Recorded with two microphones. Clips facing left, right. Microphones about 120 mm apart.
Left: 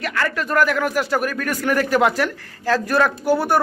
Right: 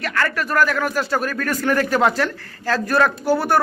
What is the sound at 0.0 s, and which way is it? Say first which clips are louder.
Speech: right 1 dB; 15° left (ahead or behind).